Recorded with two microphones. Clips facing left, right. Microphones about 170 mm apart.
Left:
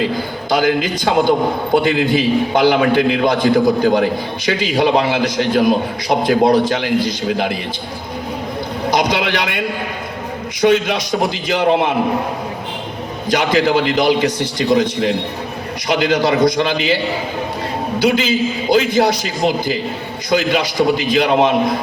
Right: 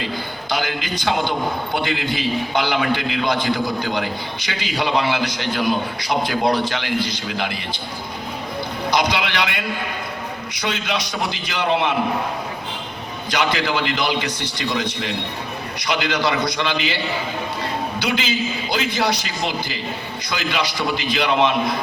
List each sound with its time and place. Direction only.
0.5 s a man's voice: 45° left (ahead or behind)
8.9 s a man's voice: 50° left (ahead or behind)
10.6 s a man's voice: 50° left (ahead or behind)
13.3 s a man's voice: 45° left (ahead or behind)
18.0 s a man's voice: 50° left (ahead or behind)